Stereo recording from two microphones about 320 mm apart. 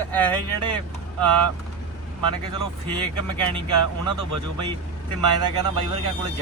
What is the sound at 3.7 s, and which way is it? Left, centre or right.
Speech, right.